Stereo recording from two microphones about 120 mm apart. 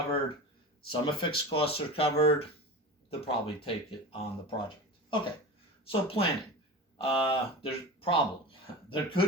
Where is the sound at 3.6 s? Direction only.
50° left (ahead or behind).